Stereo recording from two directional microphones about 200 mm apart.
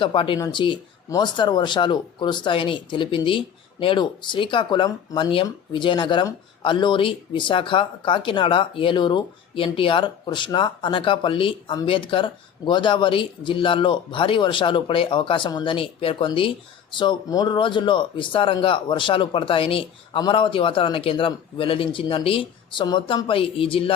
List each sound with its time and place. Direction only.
0.0 s speech: 25° left (ahead or behind)